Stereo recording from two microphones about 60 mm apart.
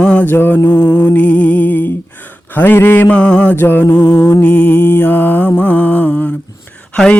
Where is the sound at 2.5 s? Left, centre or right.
Left.